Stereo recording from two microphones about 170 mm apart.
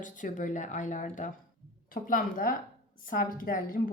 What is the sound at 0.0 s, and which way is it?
A woman's voice, 50° left (ahead or behind).